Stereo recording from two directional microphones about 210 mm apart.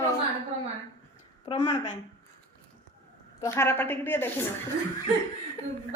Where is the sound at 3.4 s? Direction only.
10° left (ahead or behind).